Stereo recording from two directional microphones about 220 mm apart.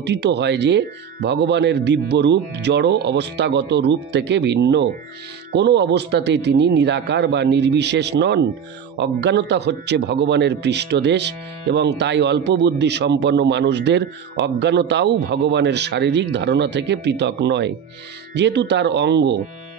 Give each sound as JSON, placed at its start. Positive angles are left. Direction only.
{"t": 0.0, "sound": "a man's voice", "side_deg": -50}